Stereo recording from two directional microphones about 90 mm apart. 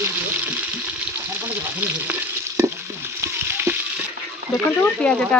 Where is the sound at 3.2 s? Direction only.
25° right (ahead or behind).